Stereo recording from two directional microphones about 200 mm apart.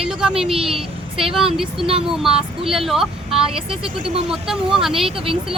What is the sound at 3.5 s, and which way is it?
Speech, 25° right (ahead or behind).